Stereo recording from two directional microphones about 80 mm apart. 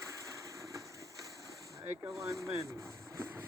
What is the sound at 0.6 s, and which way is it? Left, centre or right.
Vehicle, right.